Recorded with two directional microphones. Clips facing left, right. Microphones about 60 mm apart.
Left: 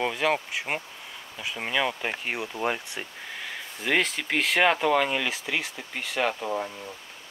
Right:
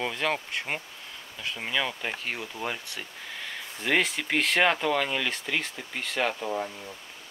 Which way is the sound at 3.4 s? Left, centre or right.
Centre.